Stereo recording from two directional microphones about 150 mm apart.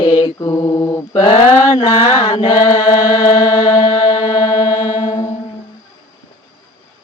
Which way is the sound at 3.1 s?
25° left (ahead or behind).